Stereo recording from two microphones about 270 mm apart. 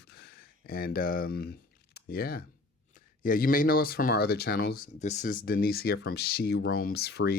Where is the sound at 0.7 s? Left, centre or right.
Left.